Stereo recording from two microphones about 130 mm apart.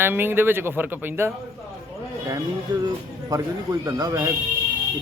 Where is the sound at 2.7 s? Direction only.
30° right (ahead or behind).